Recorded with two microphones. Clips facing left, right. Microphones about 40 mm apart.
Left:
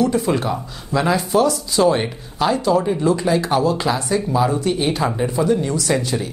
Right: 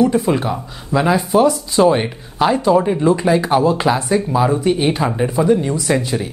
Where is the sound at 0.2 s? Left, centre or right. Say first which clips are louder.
Right 2 dB; centre.